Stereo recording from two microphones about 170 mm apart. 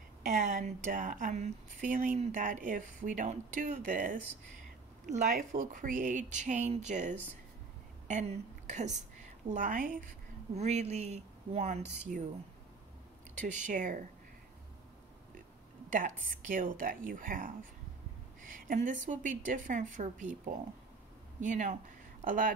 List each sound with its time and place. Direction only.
0.2 s a woman's voice: 45° right (ahead or behind)
10.5 s a woman's voice: 40° right (ahead or behind)
13.6 s a woman's voice: 50° right (ahead or behind)
15.9 s a woman's voice: 50° right (ahead or behind)